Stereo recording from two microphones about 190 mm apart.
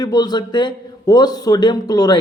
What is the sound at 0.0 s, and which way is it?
A man's voice, 20° left (ahead or behind).